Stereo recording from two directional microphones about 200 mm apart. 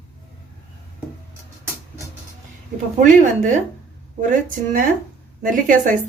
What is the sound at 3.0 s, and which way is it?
A woman's voice, 40° right (ahead or behind).